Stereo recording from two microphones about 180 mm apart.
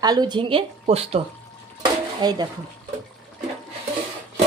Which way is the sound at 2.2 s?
25° right (ahead or behind).